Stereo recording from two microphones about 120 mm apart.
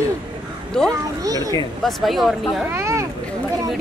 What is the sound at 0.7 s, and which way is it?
Speech, 5° left (ahead or behind).